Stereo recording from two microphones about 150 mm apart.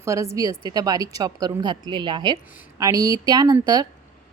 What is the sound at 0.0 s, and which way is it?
A woman's voice, 20° right (ahead or behind).